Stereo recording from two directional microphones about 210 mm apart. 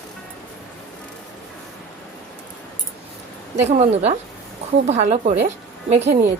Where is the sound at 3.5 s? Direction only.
30° right (ahead or behind).